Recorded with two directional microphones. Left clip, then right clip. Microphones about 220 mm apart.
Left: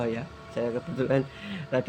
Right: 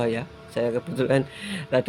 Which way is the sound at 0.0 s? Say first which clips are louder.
Right 5 dB; 45° right (ahead or behind).